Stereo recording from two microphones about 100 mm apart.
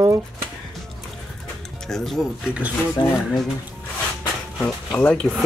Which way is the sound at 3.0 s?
50° left (ahead or behind).